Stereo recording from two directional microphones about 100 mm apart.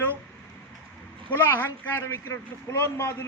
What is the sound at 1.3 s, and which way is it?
A man's voice, 20° left (ahead or behind).